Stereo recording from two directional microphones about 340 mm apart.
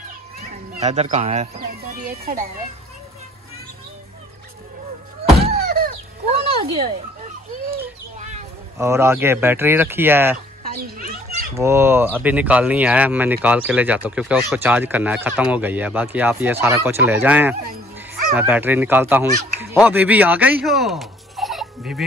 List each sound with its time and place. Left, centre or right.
0.7 s speech: centre
5.4 s a sound: right
7.7 s bird: right
8.7 s speech: centre
11.0 s children playing: right
11.5 s speech: centre